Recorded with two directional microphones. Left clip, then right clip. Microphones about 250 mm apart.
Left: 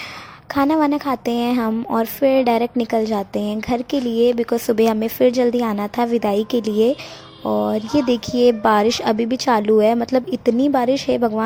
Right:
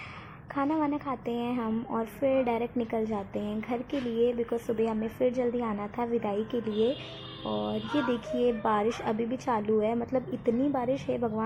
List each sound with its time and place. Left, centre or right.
0.5 s speech: left